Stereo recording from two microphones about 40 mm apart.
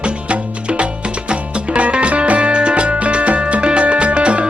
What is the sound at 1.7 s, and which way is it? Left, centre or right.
Music, right.